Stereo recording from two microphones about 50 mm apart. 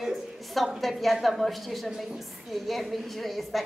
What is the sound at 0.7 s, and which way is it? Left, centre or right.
A woman's voice, centre.